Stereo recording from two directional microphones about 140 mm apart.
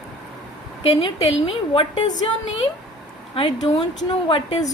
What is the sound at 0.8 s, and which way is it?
A woman's voice, 40° left (ahead or behind).